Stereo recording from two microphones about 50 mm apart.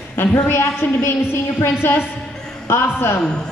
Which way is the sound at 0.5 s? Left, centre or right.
Left.